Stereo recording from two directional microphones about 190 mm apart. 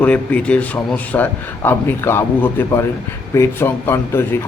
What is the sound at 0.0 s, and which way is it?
A man's voice, 5° left (ahead or behind).